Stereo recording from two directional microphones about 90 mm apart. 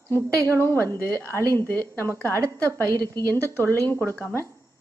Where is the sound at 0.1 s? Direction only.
25° left (ahead or behind).